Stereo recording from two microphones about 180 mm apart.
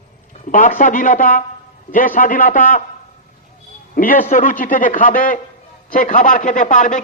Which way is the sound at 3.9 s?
50° left (ahead or behind).